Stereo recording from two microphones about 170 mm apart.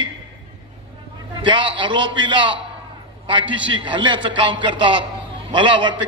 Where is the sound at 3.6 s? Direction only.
30° right (ahead or behind).